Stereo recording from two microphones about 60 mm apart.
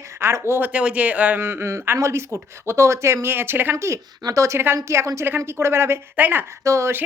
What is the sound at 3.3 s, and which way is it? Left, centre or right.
Speech, right.